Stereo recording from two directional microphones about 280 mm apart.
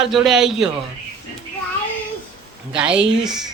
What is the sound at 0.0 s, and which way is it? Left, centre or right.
Speech, centre.